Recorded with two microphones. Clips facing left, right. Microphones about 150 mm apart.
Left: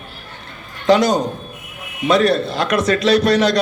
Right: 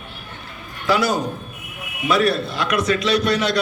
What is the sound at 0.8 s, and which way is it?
Speech, 40° left (ahead or behind).